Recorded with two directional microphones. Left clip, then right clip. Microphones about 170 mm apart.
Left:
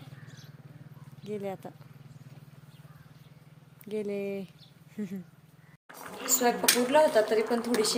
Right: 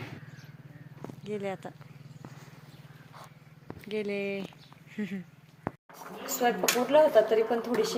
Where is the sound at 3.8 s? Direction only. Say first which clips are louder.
Right 1 dB; 15° left (ahead or behind).